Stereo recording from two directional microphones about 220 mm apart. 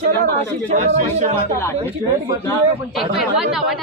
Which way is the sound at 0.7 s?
30° right (ahead or behind).